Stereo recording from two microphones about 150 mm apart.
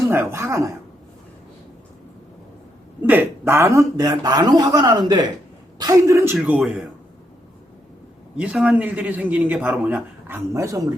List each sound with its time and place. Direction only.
0.1 s a man's voice: 15° right (ahead or behind)
3.0 s a man's voice: 10° right (ahead or behind)
6.3 s speech: 5° right (ahead or behind)
8.4 s a man's voice: 5° right (ahead or behind)